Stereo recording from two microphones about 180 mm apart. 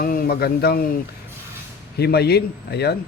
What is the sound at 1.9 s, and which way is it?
Speech, 65° left (ahead or behind).